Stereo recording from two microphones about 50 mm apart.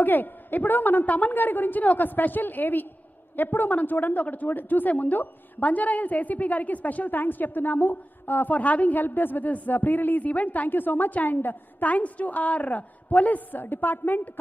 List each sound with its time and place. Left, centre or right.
0.0 s speech: left